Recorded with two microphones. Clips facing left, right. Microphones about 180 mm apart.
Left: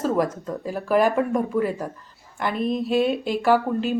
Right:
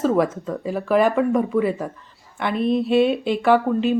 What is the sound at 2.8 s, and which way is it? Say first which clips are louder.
Speech: right 2 dB; 45° left (ahead or behind).